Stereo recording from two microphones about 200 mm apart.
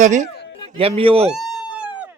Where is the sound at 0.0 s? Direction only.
40° right (ahead or behind).